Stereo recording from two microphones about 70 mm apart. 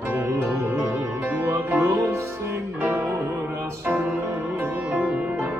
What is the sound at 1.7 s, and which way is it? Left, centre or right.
Music, right.